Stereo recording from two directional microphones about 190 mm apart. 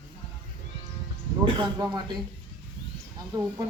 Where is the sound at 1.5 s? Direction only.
25° right (ahead or behind).